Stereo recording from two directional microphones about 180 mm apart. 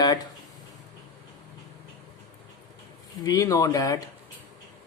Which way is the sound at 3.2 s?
20° left (ahead or behind).